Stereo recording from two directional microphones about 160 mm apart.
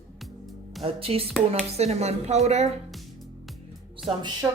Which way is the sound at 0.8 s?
35° right (ahead or behind).